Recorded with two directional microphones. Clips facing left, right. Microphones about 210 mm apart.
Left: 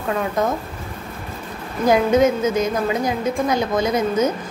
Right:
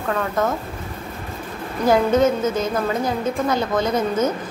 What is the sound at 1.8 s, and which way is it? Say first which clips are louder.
A woman's voice: left 1 dB; 15° left (ahead or behind).